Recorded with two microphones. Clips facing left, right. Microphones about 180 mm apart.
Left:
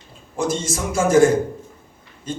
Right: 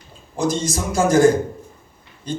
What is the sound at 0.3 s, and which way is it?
A man's voice, 40° right (ahead or behind).